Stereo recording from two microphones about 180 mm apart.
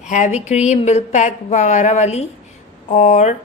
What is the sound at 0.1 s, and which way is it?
Speech, 40° left (ahead or behind).